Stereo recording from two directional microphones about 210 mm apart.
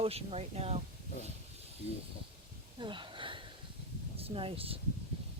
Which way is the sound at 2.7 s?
25° right (ahead or behind).